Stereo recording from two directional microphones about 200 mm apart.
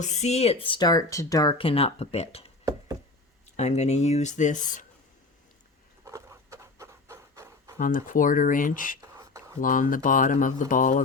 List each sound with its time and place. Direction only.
0.0 s speech: 35° left (ahead or behind)
3.6 s speech: 35° left (ahead or behind)
6.1 s a sound: 15° right (ahead or behind)
7.8 s speech: 40° left (ahead or behind)
9.0 s whispering: 15° right (ahead or behind)
9.6 s speech: 40° left (ahead or behind)